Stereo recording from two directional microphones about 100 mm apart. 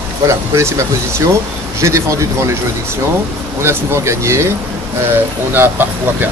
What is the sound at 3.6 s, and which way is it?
Speech, 25° right (ahead or behind).